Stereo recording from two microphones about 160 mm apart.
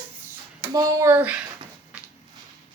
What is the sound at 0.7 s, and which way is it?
Speech, 20° right (ahead or behind).